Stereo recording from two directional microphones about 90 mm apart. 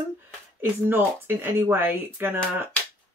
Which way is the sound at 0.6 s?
25° right (ahead or behind).